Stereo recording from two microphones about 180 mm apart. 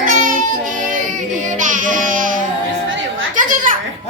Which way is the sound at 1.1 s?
45° right (ahead or behind).